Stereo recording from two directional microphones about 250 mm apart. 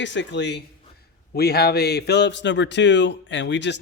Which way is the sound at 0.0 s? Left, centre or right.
Left.